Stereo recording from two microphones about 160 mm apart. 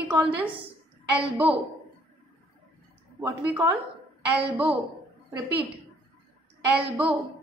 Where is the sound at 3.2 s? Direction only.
10° right (ahead or behind).